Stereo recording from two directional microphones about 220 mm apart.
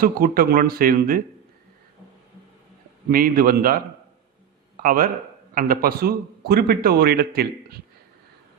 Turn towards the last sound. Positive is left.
turn(degrees=-45)  # may be behind; listen again after turning